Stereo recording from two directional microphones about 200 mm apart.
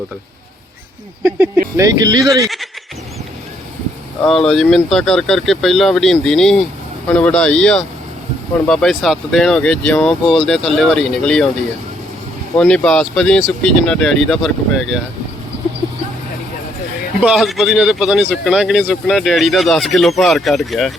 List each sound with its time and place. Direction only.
1.7 s speech: 15° right (ahead or behind)
2.4 s a man's voice: centre (ahead or behind)
4.3 s a man's voice: centre (ahead or behind)
12.5 s a man's voice: 5° left (ahead or behind)
15.5 s vehicle: 60° right (ahead or behind)
17.2 s a man's voice: 5° right (ahead or behind)